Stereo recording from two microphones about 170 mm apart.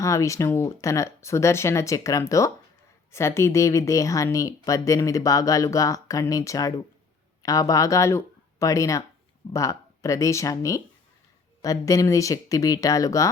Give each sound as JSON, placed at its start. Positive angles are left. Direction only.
{"t": 0.0, "sound": "speech", "side_deg": 20}